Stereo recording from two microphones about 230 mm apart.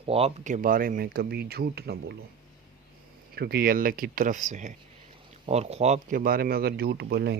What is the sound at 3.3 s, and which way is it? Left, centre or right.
Speech, right.